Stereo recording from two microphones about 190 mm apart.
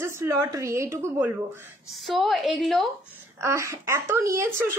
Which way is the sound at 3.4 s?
15° right (ahead or behind).